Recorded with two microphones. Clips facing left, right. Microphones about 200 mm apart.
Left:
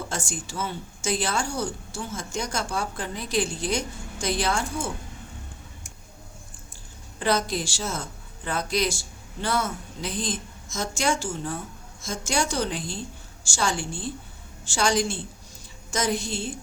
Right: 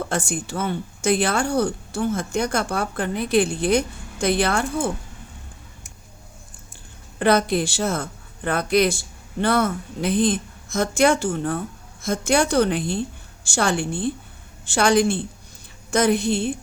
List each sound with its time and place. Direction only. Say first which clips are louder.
0.0 s speech: right 7 dB; 60° right (ahead or behind)
7.2 s a woman's voice: right 7 dB; 60° right (ahead or behind)